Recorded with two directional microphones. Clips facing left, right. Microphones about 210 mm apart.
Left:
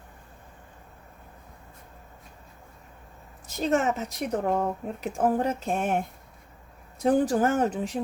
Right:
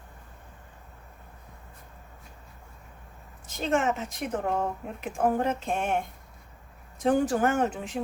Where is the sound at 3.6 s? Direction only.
40° left (ahead or behind).